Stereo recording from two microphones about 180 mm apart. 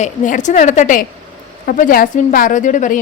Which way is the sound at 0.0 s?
45° left (ahead or behind).